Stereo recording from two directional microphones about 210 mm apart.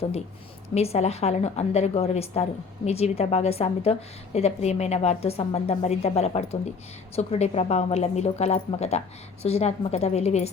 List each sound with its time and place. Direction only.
0.7 s a woman's voice: 30° left (ahead or behind)